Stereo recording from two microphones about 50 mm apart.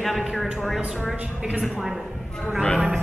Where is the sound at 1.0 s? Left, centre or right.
Right.